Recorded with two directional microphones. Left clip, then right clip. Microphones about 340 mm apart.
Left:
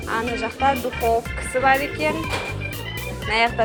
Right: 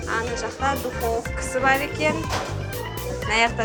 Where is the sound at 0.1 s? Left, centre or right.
Centre.